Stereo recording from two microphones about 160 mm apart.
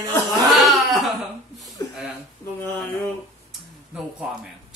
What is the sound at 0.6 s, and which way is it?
Speech, centre (ahead or behind).